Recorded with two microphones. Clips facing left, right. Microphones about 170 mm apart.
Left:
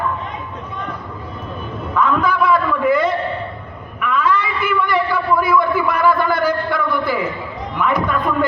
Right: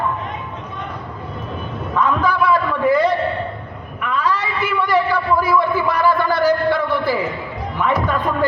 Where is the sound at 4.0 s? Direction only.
35° right (ahead or behind).